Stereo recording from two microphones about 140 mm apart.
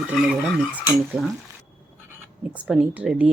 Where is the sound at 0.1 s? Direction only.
10° right (ahead or behind).